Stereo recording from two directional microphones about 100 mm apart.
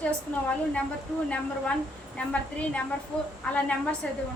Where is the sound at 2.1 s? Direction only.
10° left (ahead or behind).